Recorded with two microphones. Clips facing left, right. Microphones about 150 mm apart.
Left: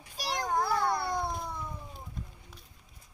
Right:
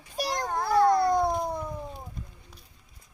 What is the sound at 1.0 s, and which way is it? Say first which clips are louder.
Cat: right 9 dB; 45° right (ahead or behind).